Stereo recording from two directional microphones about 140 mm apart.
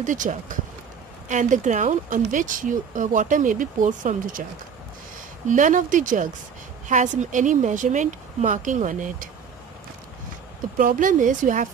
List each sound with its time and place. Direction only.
0.0 s speech: 65° right (ahead or behind)
5.5 s speech: 65° right (ahead or behind)
10.8 s speech: 75° right (ahead or behind)